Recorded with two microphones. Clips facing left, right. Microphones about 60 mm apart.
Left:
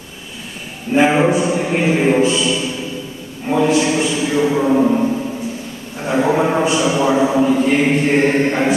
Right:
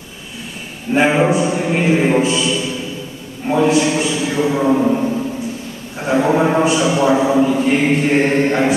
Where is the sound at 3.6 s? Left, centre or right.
Centre.